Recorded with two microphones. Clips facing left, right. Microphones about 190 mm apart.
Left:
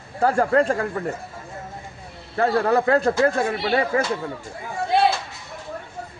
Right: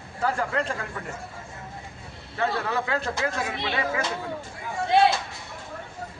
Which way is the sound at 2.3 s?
45° left (ahead or behind).